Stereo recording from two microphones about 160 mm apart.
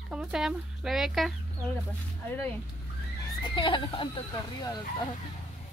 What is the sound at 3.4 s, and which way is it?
Speech, 30° left (ahead or behind).